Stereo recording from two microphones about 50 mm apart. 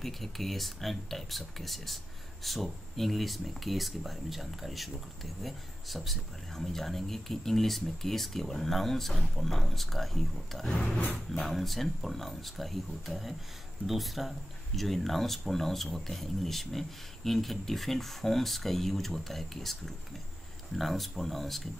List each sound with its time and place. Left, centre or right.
0.0 s speech: centre
10.7 s a sound: left
11.1 s speech: centre